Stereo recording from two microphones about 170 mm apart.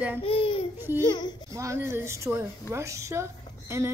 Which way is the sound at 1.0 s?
25° left (ahead or behind).